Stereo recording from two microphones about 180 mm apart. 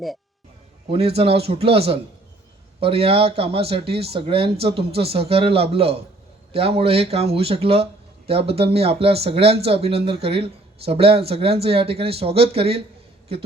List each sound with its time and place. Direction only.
0.9 s speech: 35° right (ahead or behind)